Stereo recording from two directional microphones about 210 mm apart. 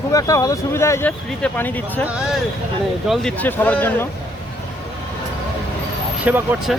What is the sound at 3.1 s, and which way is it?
Speech, 5° left (ahead or behind).